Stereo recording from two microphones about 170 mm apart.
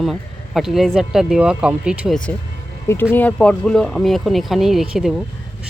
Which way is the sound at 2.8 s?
15° left (ahead or behind).